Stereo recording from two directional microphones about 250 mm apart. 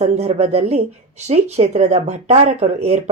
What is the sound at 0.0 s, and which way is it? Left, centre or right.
Speech, right.